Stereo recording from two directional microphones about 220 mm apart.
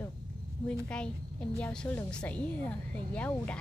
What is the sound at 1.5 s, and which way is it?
A woman's voice, 5° left (ahead or behind).